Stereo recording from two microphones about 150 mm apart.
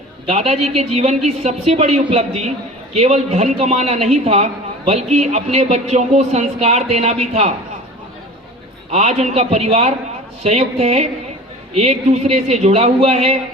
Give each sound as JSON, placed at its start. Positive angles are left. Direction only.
{"t": 0.3, "sound": "speech", "side_deg": -50}
{"t": 8.9, "sound": "speech", "side_deg": -50}